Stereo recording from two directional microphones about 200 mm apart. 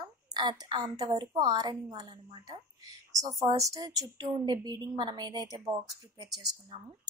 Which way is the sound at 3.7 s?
20° right (ahead or behind).